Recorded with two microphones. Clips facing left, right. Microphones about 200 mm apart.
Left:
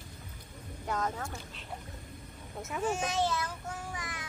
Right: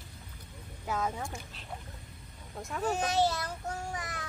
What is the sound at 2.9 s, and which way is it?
Speech, 35° right (ahead or behind).